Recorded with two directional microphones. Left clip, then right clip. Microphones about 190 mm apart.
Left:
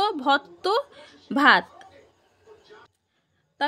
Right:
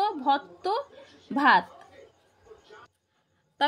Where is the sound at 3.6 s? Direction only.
Centre (ahead or behind).